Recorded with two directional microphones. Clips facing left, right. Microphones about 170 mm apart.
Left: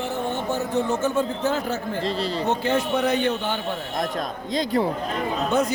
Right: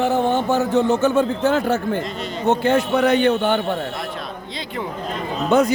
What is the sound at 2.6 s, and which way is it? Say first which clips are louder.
Speech: right 5 dB; 65° right (ahead or behind).